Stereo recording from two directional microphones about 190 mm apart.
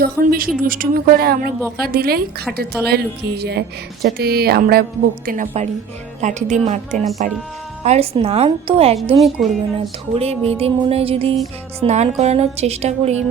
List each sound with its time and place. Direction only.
0.0 s a woman's voice: 50° right (ahead or behind)
6.9 s speech: centre (ahead or behind)
7.9 s a woman's voice: 30° right (ahead or behind)
9.1 s speech: centre (ahead or behind)
10.2 s a woman's voice: 30° right (ahead or behind)